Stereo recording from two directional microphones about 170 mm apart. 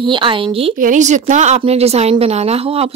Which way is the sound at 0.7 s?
50° right (ahead or behind).